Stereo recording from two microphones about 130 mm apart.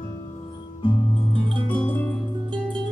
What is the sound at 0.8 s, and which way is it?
Music, 40° left (ahead or behind).